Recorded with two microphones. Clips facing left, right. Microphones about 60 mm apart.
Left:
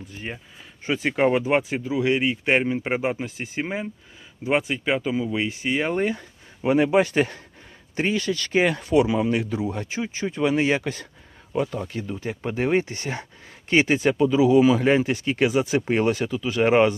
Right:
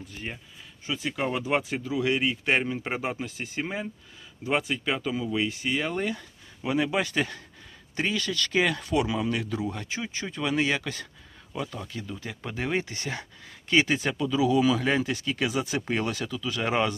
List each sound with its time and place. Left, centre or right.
0.9 s speech: left
11.5 s speech: left